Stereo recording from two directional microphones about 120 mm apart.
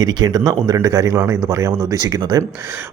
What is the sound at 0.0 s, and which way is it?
Speech, 35° right (ahead or behind).